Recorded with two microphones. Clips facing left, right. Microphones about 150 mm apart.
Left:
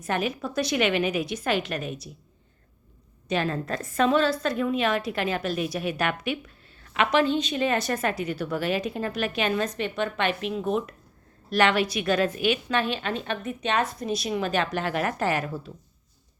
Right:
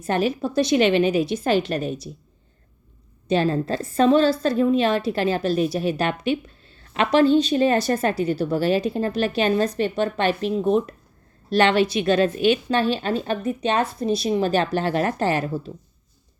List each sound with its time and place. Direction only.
0.0 s a woman's voice: 30° right (ahead or behind)
3.2 s a woman's voice: 30° right (ahead or behind)